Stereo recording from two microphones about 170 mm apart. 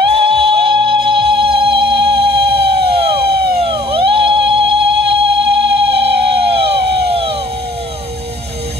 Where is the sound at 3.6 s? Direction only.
30° right (ahead or behind).